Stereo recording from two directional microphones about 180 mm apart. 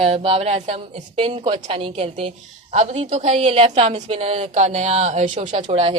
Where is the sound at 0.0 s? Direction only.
30° right (ahead or behind).